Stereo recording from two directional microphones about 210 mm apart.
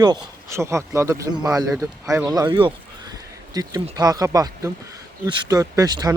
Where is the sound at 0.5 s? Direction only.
15° right (ahead or behind).